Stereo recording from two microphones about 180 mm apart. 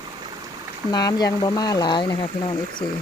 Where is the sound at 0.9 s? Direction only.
20° left (ahead or behind).